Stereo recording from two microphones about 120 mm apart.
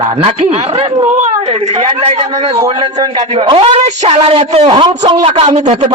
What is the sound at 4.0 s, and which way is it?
Speech, 70° right (ahead or behind).